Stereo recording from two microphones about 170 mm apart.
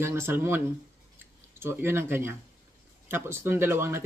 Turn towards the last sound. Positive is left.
turn(degrees=-15)  # may be behind; listen again after turning